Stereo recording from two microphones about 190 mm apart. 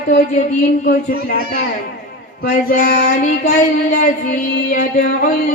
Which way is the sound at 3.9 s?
45° left (ahead or behind).